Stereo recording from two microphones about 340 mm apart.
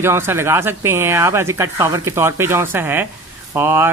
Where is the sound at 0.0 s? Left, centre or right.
Centre.